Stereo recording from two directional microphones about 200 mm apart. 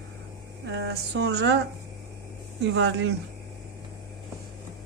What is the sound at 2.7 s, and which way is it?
Speech, 65° right (ahead or behind).